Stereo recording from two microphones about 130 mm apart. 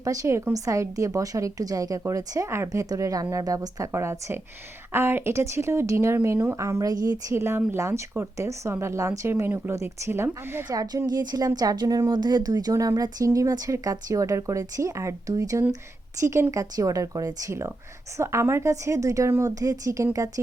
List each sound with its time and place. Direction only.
0.0 s speech: 25° right (ahead or behind)
10.7 s speech: 30° right (ahead or behind)